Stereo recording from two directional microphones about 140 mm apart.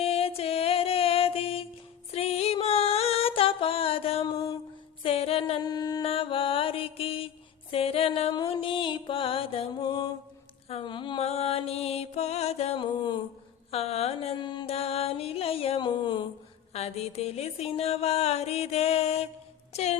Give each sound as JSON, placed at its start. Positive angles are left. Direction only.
{"t": 0.0, "sound": "music", "side_deg": 45}
{"t": 5.6, "sound": "mantra", "side_deg": 30}
{"t": 6.0, "sound": "mantra", "side_deg": 40}
{"t": 7.7, "sound": "music", "side_deg": 45}
{"t": 9.8, "sound": "mantra", "side_deg": 30}
{"t": 10.7, "sound": "a sound", "side_deg": 40}
{"t": 11.2, "sound": "music", "side_deg": 50}
{"t": 12.8, "sound": "a sound", "side_deg": 35}
{"t": 13.7, "sound": "a sound", "side_deg": 45}
{"t": 14.3, "sound": "music", "side_deg": 30}
{"t": 14.7, "sound": "music", "side_deg": 45}
{"t": 16.7, "sound": "music", "side_deg": 50}